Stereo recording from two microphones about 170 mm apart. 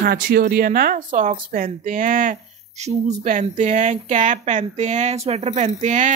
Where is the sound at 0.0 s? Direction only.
65° right (ahead or behind).